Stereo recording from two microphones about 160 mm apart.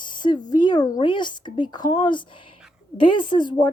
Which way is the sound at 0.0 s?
30° left (ahead or behind).